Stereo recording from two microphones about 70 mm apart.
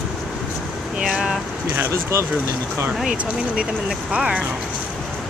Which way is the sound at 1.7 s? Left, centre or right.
Right.